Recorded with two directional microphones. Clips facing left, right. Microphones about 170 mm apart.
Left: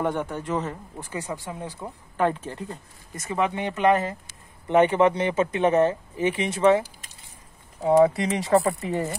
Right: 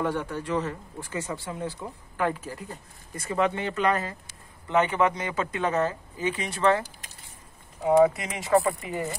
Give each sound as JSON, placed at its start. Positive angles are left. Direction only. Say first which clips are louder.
{"t": 0.0, "sound": "speech", "louder": "left 2 dB", "side_deg": 20}
{"t": 7.8, "sound": "speech", "louder": "left 2 dB", "side_deg": 35}